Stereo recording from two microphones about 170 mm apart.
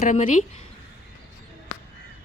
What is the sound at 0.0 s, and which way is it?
Speech, 50° left (ahead or behind).